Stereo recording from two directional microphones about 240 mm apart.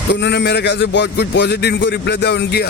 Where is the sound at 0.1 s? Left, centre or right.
Left.